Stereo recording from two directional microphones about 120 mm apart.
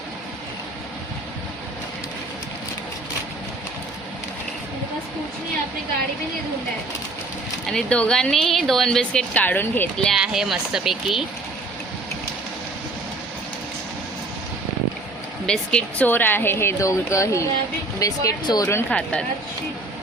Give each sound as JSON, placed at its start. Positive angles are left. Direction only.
{"t": 7.7, "sound": "a woman's voice", "side_deg": 10}
{"t": 10.2, "sound": "a woman's voice", "side_deg": -5}
{"t": 15.4, "sound": "a woman's voice", "side_deg": 5}
{"t": 18.9, "sound": "a woman's voice", "side_deg": 10}